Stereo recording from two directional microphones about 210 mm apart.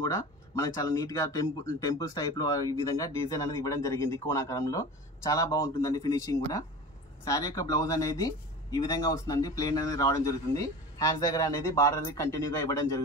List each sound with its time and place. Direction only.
0.0 s speech: 15° left (ahead or behind)